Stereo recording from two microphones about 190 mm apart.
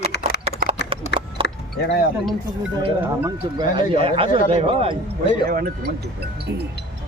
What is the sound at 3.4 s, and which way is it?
Speech, 25° right (ahead or behind).